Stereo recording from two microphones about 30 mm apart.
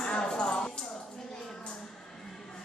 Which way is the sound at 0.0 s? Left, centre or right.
Left.